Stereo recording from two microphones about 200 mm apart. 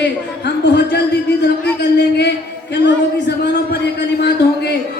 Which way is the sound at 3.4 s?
55° left (ahead or behind).